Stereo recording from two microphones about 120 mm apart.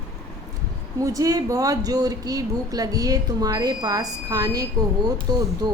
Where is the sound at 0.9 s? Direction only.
30° right (ahead or behind).